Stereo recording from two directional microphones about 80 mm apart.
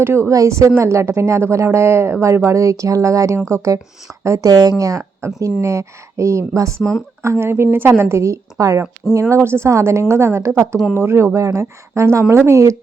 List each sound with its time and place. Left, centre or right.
0.0 s a woman's voice: right
9.3 s a woman's voice: right